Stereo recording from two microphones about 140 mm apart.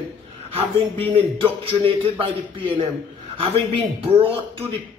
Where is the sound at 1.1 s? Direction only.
40° right (ahead or behind).